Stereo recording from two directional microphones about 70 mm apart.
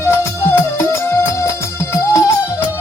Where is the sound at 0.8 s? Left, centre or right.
Left.